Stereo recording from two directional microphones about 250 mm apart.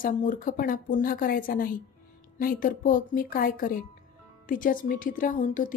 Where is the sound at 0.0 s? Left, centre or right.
Left.